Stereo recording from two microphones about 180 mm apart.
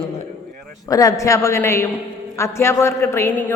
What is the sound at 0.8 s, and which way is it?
A man's voice, 20° left (ahead or behind).